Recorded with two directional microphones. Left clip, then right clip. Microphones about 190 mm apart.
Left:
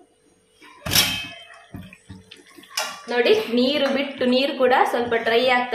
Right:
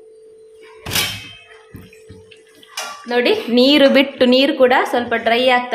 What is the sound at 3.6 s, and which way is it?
A woman's voice, 60° right (ahead or behind).